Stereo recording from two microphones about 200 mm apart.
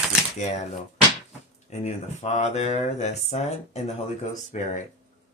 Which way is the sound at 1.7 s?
35° left (ahead or behind).